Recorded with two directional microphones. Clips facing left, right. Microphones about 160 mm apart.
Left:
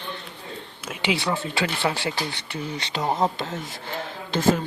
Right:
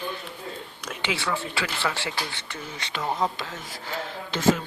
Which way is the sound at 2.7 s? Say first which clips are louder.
Left 3 dB; 35° left (ahead or behind).